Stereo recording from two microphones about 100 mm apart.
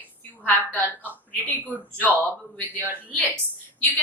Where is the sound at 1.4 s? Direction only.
15° left (ahead or behind).